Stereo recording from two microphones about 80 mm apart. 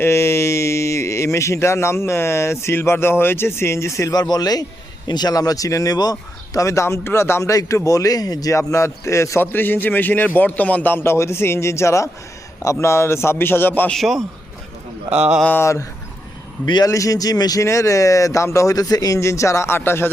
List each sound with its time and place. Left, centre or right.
0.0 s speech: left
4.1 s speech: left
9.4 s a man's voice: left
13.9 s a man's voice: centre
15.1 s a sound: centre
15.6 s speech: left
17.6 s speech: left